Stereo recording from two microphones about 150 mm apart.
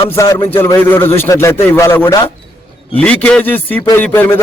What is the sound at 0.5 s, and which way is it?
A man's voice, 15° left (ahead or behind).